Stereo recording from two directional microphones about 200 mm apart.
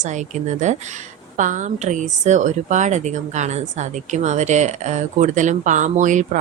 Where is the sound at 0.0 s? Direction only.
35° right (ahead or behind).